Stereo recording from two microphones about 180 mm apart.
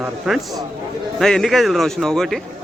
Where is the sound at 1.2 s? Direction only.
Centre (ahead or behind).